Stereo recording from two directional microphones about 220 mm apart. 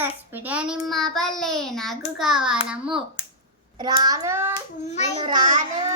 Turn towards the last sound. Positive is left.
turn(degrees=-35)  # may be behind; listen again after turning